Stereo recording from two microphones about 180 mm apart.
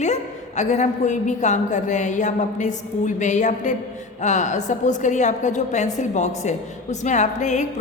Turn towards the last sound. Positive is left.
turn(degrees=40)  # may be behind; listen again after turning